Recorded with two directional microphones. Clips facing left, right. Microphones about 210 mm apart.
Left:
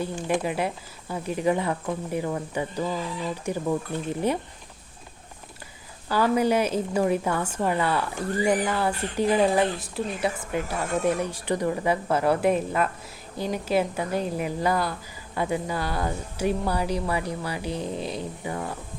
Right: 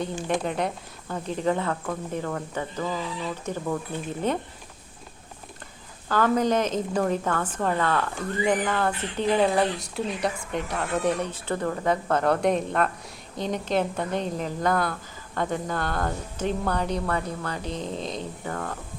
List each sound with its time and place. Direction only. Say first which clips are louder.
0.0 s speech: left 1 dB; 5° left (ahead or behind)
6.1 s speech: even; 10° left (ahead or behind)
8.2 s speech: left 2 dB; 35° left (ahead or behind)
8.4 s speech: even; 10° left (ahead or behind)